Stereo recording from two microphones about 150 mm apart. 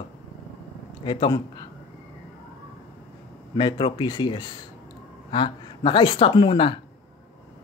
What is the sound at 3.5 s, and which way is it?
Speech, 30° left (ahead or behind).